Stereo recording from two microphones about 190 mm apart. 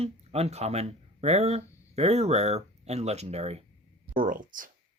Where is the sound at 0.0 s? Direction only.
35° right (ahead or behind).